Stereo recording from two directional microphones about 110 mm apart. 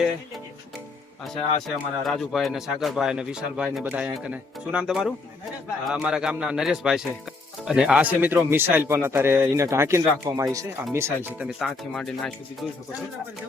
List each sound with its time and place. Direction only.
1.2 s speech: centre (ahead or behind); by 11.4 s 20° right (ahead or behind)
11.9 s speech: 5° left (ahead or behind)